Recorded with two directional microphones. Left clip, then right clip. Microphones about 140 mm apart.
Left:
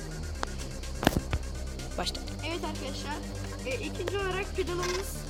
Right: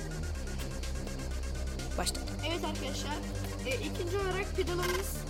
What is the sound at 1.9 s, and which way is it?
Speech, 5° right (ahead or behind).